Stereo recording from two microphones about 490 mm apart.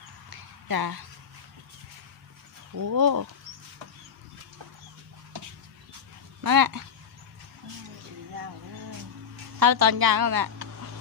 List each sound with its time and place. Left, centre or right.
0.3 s a sound: right
2.7 s speech: right
6.4 s speech: right
9.6 s a woman's voice: right